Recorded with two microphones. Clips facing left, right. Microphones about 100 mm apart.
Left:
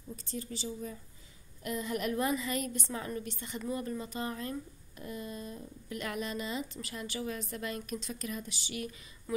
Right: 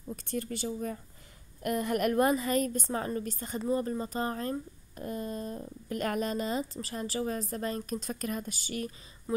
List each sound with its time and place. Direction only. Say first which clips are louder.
0.1 s a woman's voice: right 6 dB; 60° right (ahead or behind); by 8.9 s 40° right (ahead or behind)